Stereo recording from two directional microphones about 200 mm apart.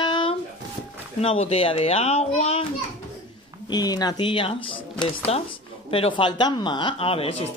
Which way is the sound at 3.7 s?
20° left (ahead or behind).